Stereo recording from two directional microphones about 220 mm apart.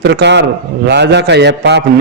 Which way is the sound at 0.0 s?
50° right (ahead or behind).